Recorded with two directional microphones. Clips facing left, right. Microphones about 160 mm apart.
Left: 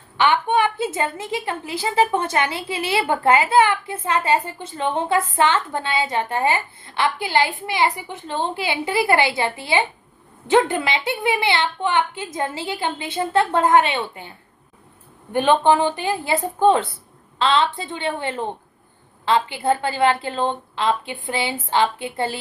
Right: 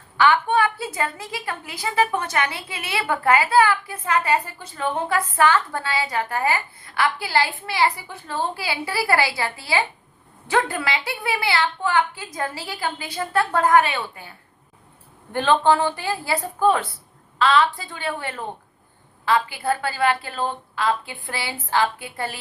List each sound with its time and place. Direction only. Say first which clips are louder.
0.2 s a woman's voice: even; 20° left (ahead or behind)